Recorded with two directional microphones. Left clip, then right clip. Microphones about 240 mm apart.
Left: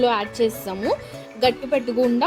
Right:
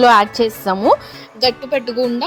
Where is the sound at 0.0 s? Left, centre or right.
Right.